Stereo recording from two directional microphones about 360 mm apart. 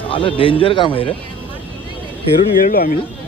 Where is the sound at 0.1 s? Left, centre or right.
Centre.